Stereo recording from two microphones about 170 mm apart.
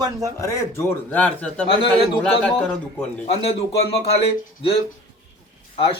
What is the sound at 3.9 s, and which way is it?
Speech, 35° left (ahead or behind).